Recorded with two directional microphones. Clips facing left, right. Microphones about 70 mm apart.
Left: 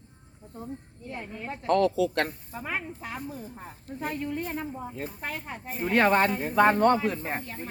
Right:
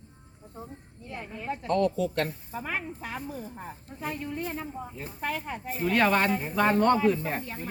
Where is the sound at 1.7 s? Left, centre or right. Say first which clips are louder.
Left 3 dB; left.